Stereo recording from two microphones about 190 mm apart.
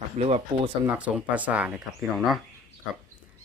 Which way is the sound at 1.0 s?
5° right (ahead or behind).